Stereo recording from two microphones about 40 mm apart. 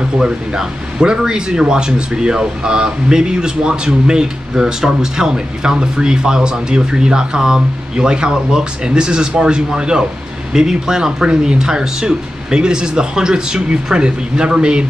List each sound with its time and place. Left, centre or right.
0.6 s speech: centre